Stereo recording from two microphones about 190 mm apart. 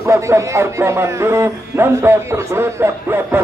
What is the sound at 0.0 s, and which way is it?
Speech, 15° right (ahead or behind).